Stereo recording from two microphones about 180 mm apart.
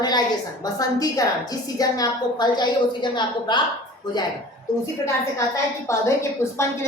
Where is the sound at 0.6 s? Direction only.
20° left (ahead or behind).